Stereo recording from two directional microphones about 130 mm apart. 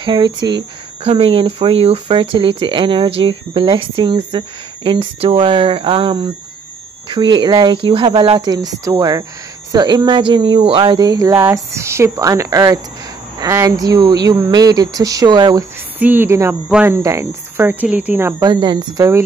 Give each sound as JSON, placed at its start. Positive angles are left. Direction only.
{"t": 0.0, "sound": "speech", "side_deg": -35}
{"t": 16.0, "sound": "speech", "side_deg": -15}
{"t": 18.4, "sound": "speech", "side_deg": -35}